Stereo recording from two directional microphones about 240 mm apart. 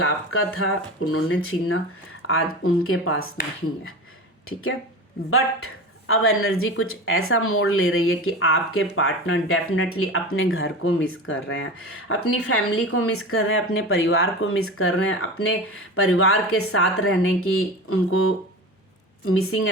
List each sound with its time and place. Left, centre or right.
0.0 s speech: left
5.3 s speech: left